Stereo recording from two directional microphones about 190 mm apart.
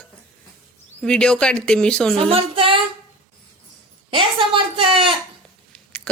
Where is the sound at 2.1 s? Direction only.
30° right (ahead or behind).